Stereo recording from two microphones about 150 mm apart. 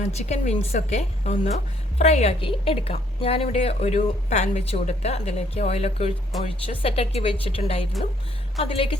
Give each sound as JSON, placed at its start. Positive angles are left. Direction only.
{"t": 0.0, "sound": "a woman's voice", "side_deg": 50}